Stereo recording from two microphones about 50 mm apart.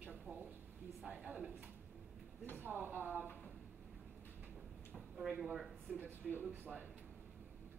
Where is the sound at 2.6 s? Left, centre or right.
Right.